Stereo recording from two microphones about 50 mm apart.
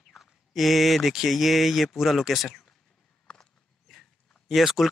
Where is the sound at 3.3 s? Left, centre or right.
Centre.